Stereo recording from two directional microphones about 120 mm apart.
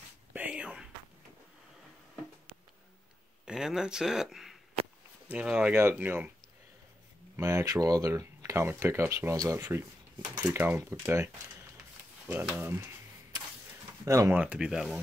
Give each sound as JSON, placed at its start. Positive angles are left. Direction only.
{"t": 0.3, "sound": "a sound", "side_deg": -10}
{"t": 3.4, "sound": "speech", "side_deg": -5}
{"t": 7.3, "sound": "speech", "side_deg": -25}
{"t": 12.3, "sound": "speech", "side_deg": -15}
{"t": 13.3, "sound": "a sound", "side_deg": -35}
{"t": 14.0, "sound": "speech", "side_deg": -25}
{"t": 14.3, "sound": "speech", "side_deg": -10}